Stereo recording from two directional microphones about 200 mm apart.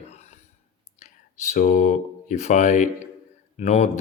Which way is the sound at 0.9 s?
35° left (ahead or behind).